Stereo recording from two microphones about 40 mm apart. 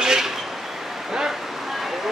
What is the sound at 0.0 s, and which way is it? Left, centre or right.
Vehicle, centre.